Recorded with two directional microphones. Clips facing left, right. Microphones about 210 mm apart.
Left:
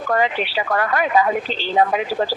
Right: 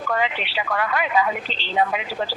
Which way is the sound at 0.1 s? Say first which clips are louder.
Left 5 dB; 45° left (ahead or behind).